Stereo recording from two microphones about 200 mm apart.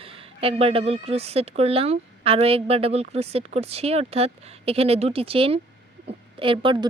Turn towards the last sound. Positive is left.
turn(degrees=-20)  # may be behind; listen again after turning